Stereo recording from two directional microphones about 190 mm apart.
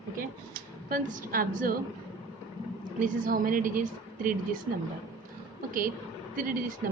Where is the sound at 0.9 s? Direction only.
45° right (ahead or behind).